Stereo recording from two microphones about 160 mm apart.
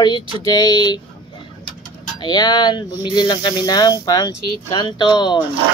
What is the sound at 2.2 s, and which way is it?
Speech, 25° left (ahead or behind).